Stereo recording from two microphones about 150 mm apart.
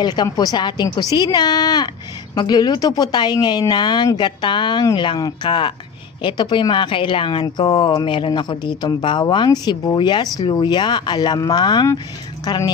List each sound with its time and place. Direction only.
0.0 s a woman's voice: 25° left (ahead or behind)